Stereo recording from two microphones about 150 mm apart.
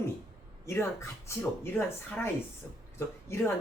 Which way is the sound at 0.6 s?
20° left (ahead or behind).